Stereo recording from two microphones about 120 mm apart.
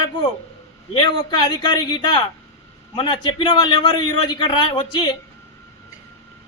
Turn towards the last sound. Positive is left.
turn(degrees=40)  # may be behind; listen again after turning